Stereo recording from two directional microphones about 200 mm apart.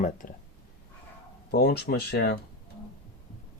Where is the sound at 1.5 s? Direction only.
50° left (ahead or behind).